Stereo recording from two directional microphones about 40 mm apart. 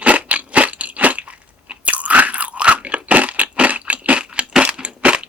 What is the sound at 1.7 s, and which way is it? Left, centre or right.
Biting, right.